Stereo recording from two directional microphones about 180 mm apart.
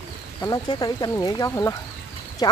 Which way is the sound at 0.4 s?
20° left (ahead or behind).